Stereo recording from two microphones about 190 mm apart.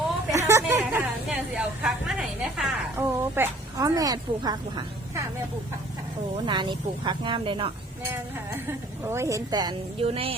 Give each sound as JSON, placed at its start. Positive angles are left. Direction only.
{"t": 0.3, "sound": "vehicle", "side_deg": -15}
{"t": 1.3, "sound": "a woman's voice", "side_deg": 0}
{"t": 6.4, "sound": "speech", "side_deg": -25}
{"t": 9.0, "sound": "speech", "side_deg": -15}